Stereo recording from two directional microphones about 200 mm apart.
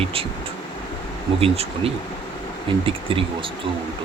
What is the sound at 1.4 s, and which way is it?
Speech, 30° right (ahead or behind).